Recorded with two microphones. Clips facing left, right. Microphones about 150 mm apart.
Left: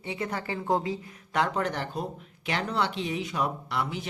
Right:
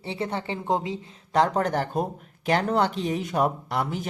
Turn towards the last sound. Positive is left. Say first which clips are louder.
# right 3 dB
turn(degrees=-45)  # may be behind; listen again after turning